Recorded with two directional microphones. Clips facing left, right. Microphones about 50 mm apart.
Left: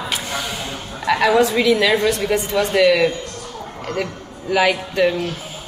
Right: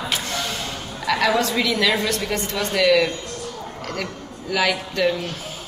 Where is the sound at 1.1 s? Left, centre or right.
Centre.